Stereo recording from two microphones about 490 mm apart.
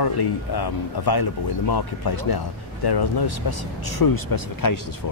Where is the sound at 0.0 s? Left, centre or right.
Left.